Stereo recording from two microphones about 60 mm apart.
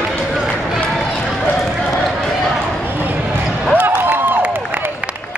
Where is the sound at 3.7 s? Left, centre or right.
Right.